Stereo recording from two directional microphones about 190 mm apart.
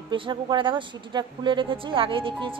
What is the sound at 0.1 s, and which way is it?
A woman's voice, 25° right (ahead or behind).